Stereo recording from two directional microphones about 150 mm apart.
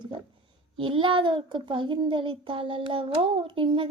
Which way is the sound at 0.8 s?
35° right (ahead or behind).